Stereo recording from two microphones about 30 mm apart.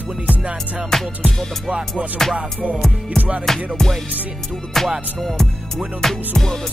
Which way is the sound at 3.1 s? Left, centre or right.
Right.